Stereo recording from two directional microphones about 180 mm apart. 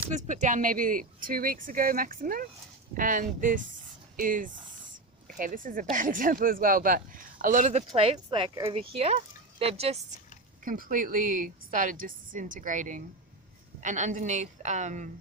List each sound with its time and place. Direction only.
0.3 s speech: 45° right (ahead or behind)
10.6 s speech: 50° right (ahead or behind)